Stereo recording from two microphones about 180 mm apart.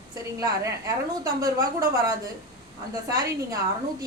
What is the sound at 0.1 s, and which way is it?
A woman's voice, 20° right (ahead or behind).